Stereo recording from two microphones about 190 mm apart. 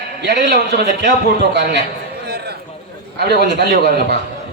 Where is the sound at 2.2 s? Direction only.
60° right (ahead or behind).